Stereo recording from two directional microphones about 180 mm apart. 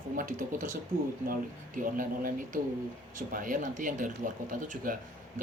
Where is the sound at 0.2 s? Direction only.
45° right (ahead or behind).